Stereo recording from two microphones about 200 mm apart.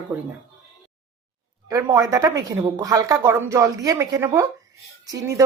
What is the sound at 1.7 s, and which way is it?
Speech, 15° right (ahead or behind).